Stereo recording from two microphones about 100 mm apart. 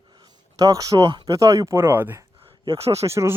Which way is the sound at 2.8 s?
90° right.